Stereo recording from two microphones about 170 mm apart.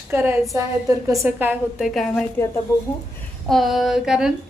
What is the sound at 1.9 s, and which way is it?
Speech, centre (ahead or behind).